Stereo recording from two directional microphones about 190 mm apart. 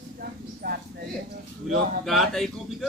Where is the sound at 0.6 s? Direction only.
55° right (ahead or behind).